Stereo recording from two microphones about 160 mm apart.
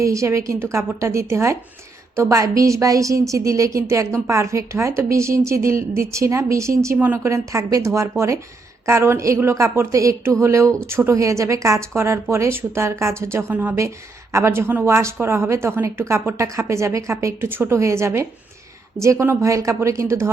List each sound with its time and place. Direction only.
0.0 s a woman's voice: 20° right (ahead or behind)